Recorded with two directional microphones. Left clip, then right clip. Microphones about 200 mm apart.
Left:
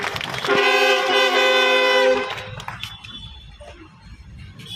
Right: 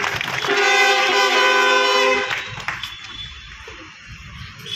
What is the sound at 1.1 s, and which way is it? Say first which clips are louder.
Music: right 1 dB; 25° right (ahead or behind).